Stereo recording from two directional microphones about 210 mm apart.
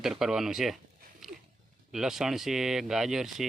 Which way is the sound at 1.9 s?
Centre (ahead or behind).